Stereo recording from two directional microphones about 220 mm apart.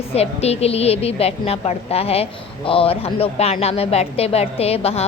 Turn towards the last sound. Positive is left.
turn(degrees=25)  # may be behind; listen again after turning